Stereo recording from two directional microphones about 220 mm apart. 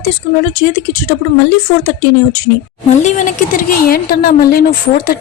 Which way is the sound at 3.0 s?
35° left (ahead or behind).